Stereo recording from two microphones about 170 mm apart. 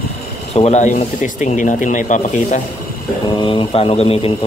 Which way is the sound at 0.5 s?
40° left (ahead or behind).